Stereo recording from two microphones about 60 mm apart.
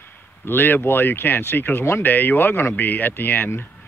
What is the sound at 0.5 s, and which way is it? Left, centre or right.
Speech, left.